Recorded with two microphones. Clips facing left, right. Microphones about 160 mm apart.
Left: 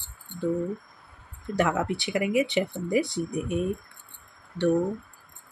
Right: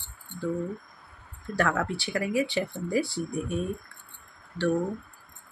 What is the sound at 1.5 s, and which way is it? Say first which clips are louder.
Speech: left 2 dB; 20° left (ahead or behind).